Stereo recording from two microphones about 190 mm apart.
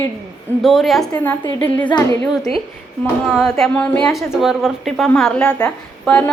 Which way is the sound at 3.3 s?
Centre (ahead or behind).